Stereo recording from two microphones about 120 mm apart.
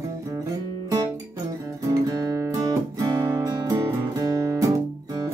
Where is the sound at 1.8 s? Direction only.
30° right (ahead or behind).